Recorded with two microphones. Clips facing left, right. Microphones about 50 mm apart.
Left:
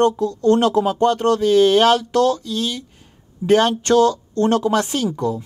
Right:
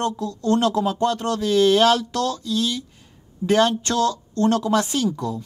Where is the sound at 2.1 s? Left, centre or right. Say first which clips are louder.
Left 6 dB; left.